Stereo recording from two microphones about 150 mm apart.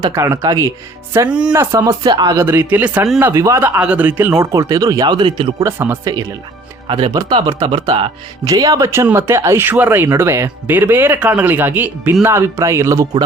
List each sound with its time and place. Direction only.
0.0 s speech: 20° right (ahead or behind)
1.3 s speech: 5° right (ahead or behind)
1.7 s speech: 20° right (ahead or behind)
3.8 s speech: 10° right (ahead or behind); by 5.6 s 30° right (ahead or behind)
5.6 s speech: 15° right (ahead or behind)
6.8 s speech: 30° right (ahead or behind)
8.4 s speech: 25° right (ahead or behind)